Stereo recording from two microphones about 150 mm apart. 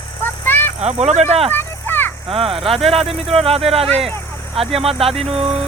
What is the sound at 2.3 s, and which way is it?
Speech, 40° right (ahead or behind).